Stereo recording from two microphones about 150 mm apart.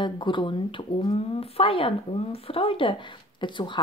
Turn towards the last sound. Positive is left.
turn(degrees=30)  # may be behind; listen again after turning